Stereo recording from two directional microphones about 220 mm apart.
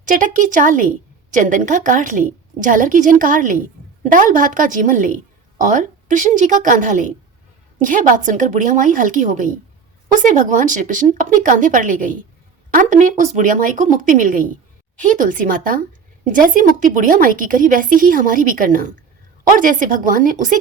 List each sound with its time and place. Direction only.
0.0 s a woman's voice: 35° right (ahead or behind)